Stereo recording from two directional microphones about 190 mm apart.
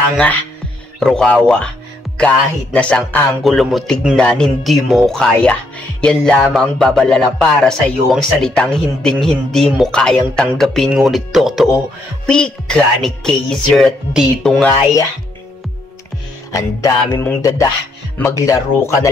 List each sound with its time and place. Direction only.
0.9 s speech: 5° left (ahead or behind)
16.5 s music: 15° left (ahead or behind)